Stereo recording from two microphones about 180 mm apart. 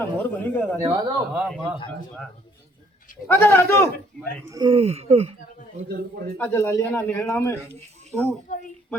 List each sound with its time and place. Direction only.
0.0 s speech: 10° left (ahead or behind)
0.8 s speech: 15° right (ahead or behind)
1.4 s speech: centre (ahead or behind)
3.3 s speech: 15° left (ahead or behind)
4.4 s speech: 20° right (ahead or behind)
4.7 s speech: 35° right (ahead or behind)
6.3 s speech: 15° left (ahead or behind)
8.1 s speech: centre (ahead or behind)